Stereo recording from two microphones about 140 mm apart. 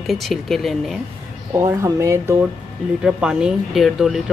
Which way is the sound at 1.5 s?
20° right (ahead or behind).